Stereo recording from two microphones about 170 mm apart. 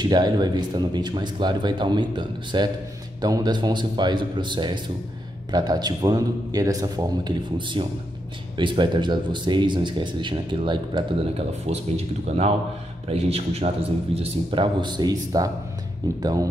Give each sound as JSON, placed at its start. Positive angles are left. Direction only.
{"t": 0.0, "sound": "a man's voice", "side_deg": -25}